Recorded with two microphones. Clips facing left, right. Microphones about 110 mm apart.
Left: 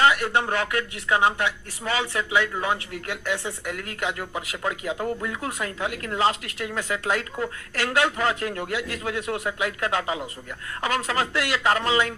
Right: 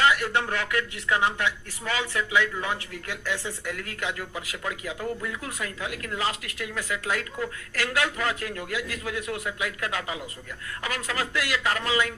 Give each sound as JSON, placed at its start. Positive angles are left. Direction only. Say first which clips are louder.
{"t": 0.0, "sound": "speech", "louder": "left 3 dB", "side_deg": 20}